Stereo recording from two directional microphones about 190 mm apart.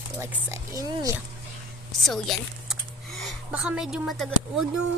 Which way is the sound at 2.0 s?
Centre (ahead or behind).